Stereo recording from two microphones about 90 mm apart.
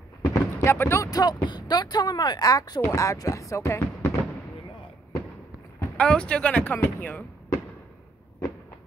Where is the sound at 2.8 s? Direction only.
35° left (ahead or behind).